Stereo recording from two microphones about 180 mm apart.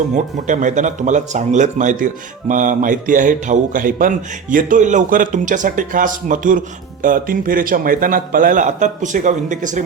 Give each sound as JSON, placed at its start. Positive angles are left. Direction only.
{"t": 0.1, "sound": "a man's voice", "side_deg": -45}